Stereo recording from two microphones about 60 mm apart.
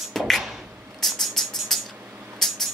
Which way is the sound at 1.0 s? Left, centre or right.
Centre.